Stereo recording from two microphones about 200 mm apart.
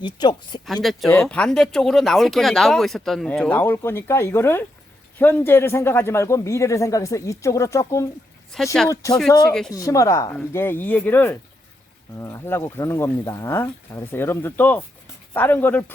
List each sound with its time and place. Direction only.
0.0 s speech: 20° left (ahead or behind)
0.6 s speech: centre (ahead or behind)
8.5 s speech: centre (ahead or behind)
9.0 s speech: 15° left (ahead or behind)